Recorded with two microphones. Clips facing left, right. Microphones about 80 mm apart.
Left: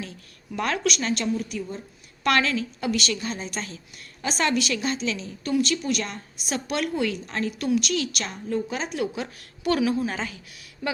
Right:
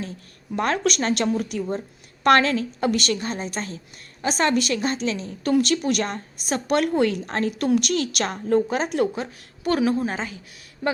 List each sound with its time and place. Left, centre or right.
0.5 s a woman's voice: right
5.4 s a woman's voice: right
9.1 s a woman's voice: right